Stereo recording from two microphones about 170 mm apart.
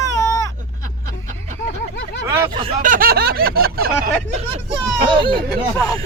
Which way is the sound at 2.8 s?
55° right (ahead or behind).